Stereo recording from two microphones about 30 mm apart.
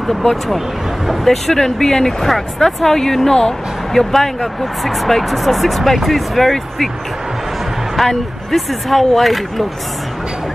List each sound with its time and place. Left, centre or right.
0.0 s speech: centre
3.9 s speech: centre
8.0 s speech: centre